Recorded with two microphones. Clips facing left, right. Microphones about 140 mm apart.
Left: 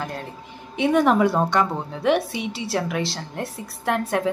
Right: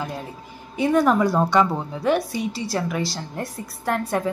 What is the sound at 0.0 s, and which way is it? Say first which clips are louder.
Speech: even; 10° right (ahead or behind).